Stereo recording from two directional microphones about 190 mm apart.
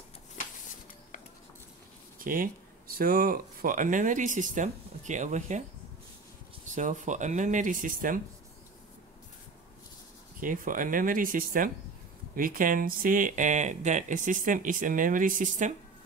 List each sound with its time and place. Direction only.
2.1 s speech: 50° right (ahead or behind)
6.6 s speech: 40° right (ahead or behind)
10.4 s speech: 45° right (ahead or behind)